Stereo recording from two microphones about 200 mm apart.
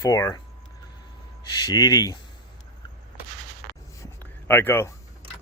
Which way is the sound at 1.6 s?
20° left (ahead or behind).